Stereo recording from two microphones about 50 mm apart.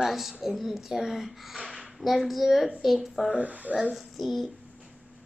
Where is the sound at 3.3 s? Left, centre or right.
Right.